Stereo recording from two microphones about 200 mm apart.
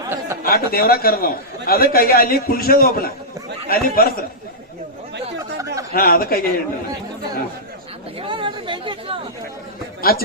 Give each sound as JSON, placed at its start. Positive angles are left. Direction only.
{"t": 0.1, "sound": "a sound", "side_deg": -10}
{"t": 0.4, "sound": "a man's voice", "side_deg": 50}
{"t": 5.4, "sound": "a sound", "side_deg": -15}
{"t": 5.9, "sound": "a man's voice", "side_deg": 50}
{"t": 8.2, "sound": "chatter", "side_deg": -25}
{"t": 10.0, "sound": "a man's voice", "side_deg": 50}